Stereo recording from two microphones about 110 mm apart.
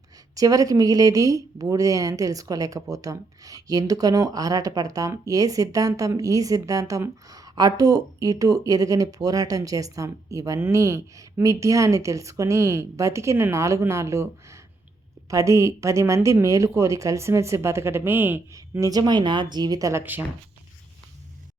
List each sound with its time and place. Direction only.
0.3 s speech: 35° right (ahead or behind)